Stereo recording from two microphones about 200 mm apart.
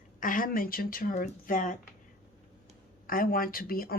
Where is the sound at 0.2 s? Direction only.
45° left (ahead or behind).